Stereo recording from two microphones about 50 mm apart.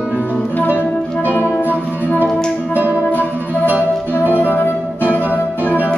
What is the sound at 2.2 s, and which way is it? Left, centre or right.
Music, centre.